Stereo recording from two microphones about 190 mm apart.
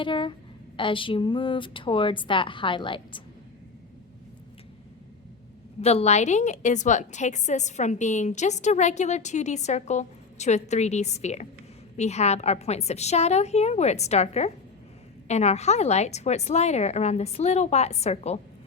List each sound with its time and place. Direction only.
0.0 s a woman's voice: 25° left (ahead or behind)
5.8 s a woman's voice: 35° left (ahead or behind)